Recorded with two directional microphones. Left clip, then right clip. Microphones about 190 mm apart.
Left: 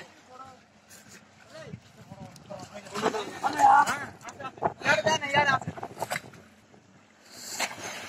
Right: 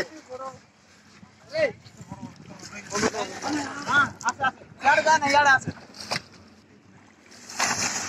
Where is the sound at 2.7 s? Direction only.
15° left (ahead or behind).